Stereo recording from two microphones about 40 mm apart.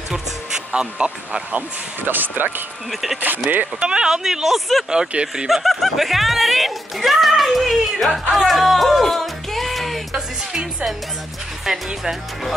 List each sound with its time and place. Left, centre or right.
0.7 s speech: right
2.0 s speech: right
2.9 s speech: centre
3.5 s speech: right
3.8 s speech: right
4.8 s speech: right
5.5 s speech: centre
8.3 s music: centre
10.1 s music: centre
11.6 s speech: centre